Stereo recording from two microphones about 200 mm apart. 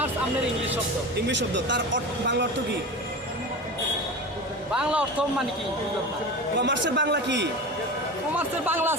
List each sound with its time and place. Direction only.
1.3 s speech: 65° right (ahead or behind)
4.7 s a man's voice: 5° right (ahead or behind)
6.6 s speech: 60° right (ahead or behind)
8.4 s a man's voice: 10° right (ahead or behind)